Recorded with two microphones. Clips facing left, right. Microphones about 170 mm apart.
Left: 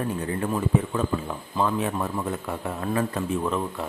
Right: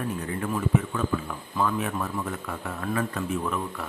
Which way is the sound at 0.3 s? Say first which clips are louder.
Left 1 dB; 30° left (ahead or behind).